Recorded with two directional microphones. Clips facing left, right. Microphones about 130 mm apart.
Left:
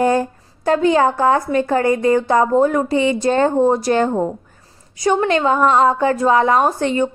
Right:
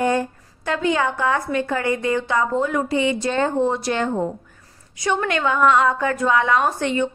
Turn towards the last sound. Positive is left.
turn(degrees=35)  # may be behind; listen again after turning